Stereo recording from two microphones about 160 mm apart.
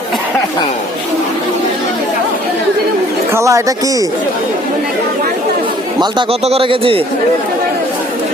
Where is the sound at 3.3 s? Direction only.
20° right (ahead or behind).